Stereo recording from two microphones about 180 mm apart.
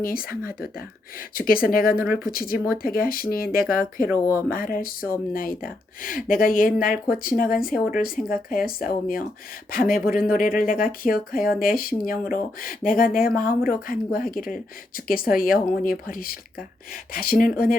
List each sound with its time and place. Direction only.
0.0 s speech: 55° left (ahead or behind)
4.3 s speech: 15° right (ahead or behind)
4.5 s speech: 55° left (ahead or behind)